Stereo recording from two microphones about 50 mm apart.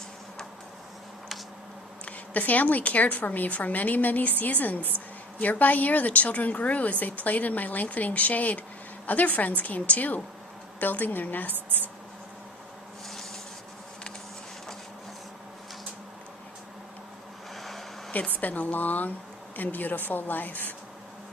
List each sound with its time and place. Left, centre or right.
2.0 s a woman's voice: left
13.1 s rub: centre
17.5 s vehicle: centre
18.1 s a woman's voice: left